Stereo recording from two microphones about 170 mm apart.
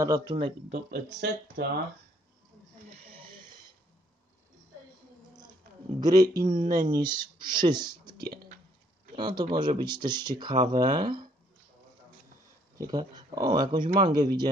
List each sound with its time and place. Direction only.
0.0 s speech: 25° right (ahead or behind)
0.7 s speech: 70° right (ahead or behind)
5.9 s speech: 20° right (ahead or behind)
8.3 s a sound: 60° right (ahead or behind)
9.1 s speech: 25° right (ahead or behind)
12.7 s speech: 20° right (ahead or behind)